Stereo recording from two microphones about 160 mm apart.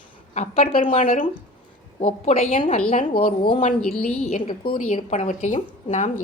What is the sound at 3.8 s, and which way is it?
Speech, 5° left (ahead or behind).